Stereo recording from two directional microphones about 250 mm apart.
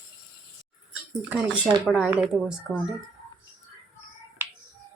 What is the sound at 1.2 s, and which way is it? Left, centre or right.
Speech, centre.